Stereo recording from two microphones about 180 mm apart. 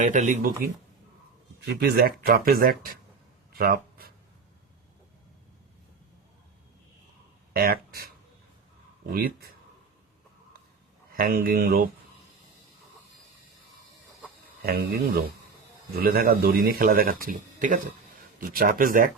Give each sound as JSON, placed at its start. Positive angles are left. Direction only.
{"t": 0.0, "sound": "speech", "side_deg": -45}
{"t": 1.7, "sound": "speech", "side_deg": -60}
{"t": 3.6, "sound": "writing", "side_deg": -55}
{"t": 7.5, "sound": "speech", "side_deg": -55}
{"t": 11.1, "sound": "speech", "side_deg": -55}
{"t": 14.6, "sound": "speech", "side_deg": -55}